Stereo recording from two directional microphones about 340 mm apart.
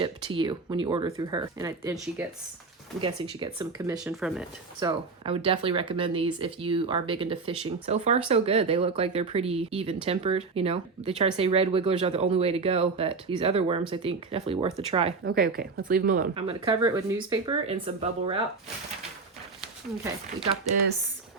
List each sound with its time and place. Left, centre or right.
0.0 s speech: centre